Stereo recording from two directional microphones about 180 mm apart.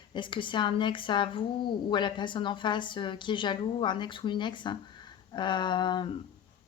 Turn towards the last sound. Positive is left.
turn(degrees=25)  # may be behind; listen again after turning